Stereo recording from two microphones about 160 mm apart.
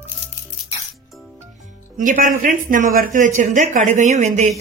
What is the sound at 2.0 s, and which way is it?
Speech, 55° right (ahead or behind).